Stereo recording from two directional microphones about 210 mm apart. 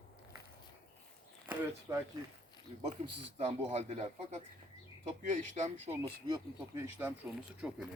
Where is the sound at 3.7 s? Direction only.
30° right (ahead or behind).